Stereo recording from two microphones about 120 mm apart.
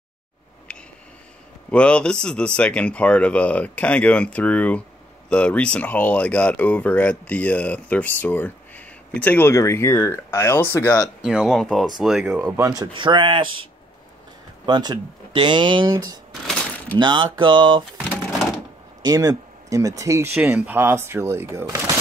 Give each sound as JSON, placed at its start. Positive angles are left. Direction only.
{"t": 0.7, "sound": "a sound", "side_deg": 10}
{"t": 1.7, "sound": "speech", "side_deg": 10}
{"t": 9.5, "sound": "speech", "side_deg": 25}
{"t": 11.1, "sound": "speech", "side_deg": -5}
{"t": 12.4, "sound": "speech", "side_deg": -20}
{"t": 12.9, "sound": "speech", "side_deg": -40}
{"t": 14.7, "sound": "speech", "side_deg": -35}
{"t": 19.0, "sound": "speech", "side_deg": -30}
{"t": 20.4, "sound": "speech", "side_deg": -15}